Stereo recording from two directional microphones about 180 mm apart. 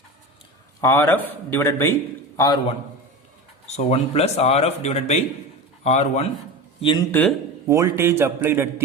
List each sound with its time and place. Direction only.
0.8 s a man's voice: 15° left (ahead or behind)
3.8 s speech: 35° left (ahead or behind)
7.1 s a man's voice: 10° left (ahead or behind)
7.7 s a man's voice: 15° right (ahead or behind)